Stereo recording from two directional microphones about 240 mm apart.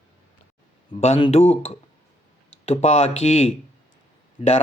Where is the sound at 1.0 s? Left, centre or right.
Left.